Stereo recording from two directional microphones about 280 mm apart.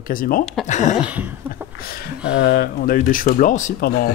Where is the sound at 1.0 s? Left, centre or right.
Centre.